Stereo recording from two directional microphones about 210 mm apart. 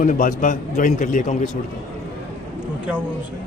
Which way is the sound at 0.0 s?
40° left (ahead or behind).